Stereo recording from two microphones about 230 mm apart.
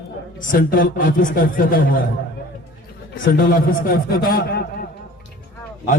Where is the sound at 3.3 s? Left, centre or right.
Left.